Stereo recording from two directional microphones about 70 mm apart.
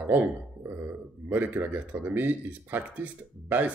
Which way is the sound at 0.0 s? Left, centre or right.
Right.